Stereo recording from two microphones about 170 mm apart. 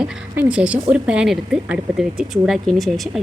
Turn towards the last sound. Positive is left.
turn(degrees=0)  # may be behind; listen again after turning